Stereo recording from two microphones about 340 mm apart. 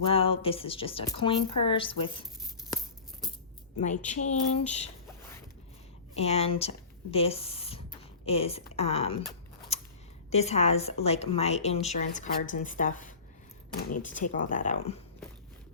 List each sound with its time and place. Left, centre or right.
0.0 s speech: centre
3.8 s speech: left
6.1 s speech: centre
9.7 s a sound: centre
10.2 s speech: centre
14.3 s speech: left